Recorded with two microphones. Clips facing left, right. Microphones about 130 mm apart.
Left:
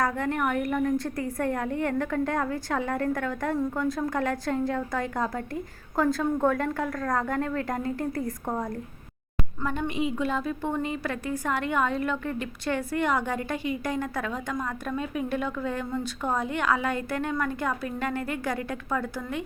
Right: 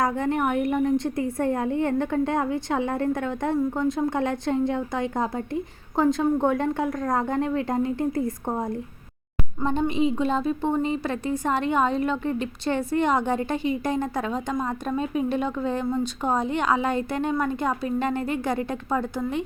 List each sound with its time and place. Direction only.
0.0 s a woman's voice: 25° right (ahead or behind)